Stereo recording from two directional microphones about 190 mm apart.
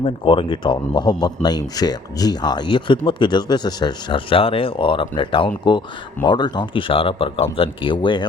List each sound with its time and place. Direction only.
0.0 s speech: 25° left (ahead or behind)